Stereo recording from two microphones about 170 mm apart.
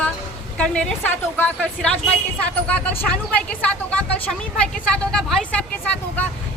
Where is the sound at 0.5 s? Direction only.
5° left (ahead or behind).